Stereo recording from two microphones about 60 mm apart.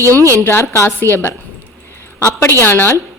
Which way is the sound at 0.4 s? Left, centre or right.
Left.